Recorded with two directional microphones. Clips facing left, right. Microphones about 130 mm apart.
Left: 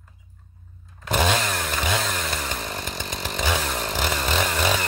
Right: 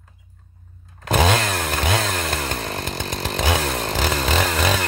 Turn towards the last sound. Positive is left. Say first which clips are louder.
# right 3 dB
turn(degrees=-85)